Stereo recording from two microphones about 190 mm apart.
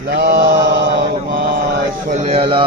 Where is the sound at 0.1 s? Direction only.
60° right (ahead or behind).